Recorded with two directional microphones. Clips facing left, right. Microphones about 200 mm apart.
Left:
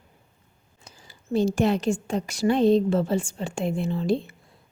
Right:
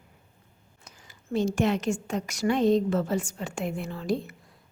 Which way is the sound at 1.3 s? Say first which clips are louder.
Left 3 dB; 35° left (ahead or behind).